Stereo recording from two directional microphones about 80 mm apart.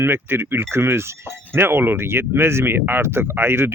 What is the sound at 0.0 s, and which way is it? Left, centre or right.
Speech, right.